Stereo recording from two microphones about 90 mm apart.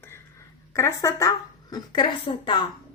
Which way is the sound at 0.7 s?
35° left (ahead or behind).